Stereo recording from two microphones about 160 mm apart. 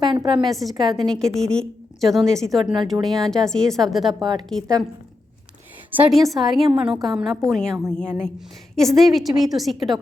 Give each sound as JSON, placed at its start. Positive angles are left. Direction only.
{"t": 0.0, "sound": "a woman's voice", "side_deg": -30}
{"t": 0.3, "sound": "a woman's voice", "side_deg": 0}
{"t": 6.0, "sound": "a woman's voice", "side_deg": 0}